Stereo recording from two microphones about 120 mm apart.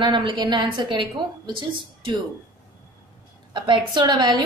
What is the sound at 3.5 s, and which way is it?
Speech, 40° right (ahead or behind).